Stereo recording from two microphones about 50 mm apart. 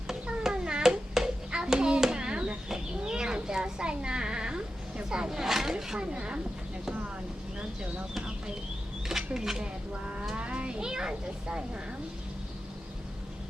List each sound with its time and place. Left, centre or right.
0.4 s a sound: centre
5.7 s speech: centre
9.0 s speech: centre
10.3 s a child's voice: right